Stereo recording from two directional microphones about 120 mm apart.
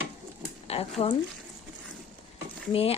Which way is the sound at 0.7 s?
60° left (ahead or behind).